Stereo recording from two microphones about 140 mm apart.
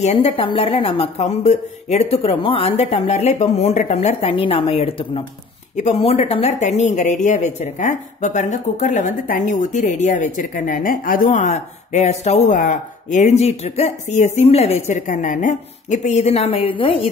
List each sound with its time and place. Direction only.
0.0 s a woman's voice: 45° left (ahead or behind)
6.8 s speech: 60° left (ahead or behind); by 17.1 s 40° left (ahead or behind)